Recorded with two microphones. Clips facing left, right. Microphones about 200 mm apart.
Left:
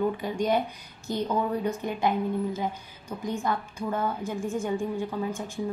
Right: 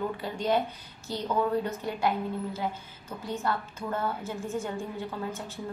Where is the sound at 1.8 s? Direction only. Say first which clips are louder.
Left 2 dB; 15° left (ahead or behind).